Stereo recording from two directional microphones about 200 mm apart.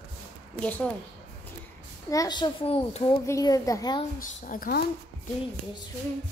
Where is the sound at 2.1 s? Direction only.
20° left (ahead or behind).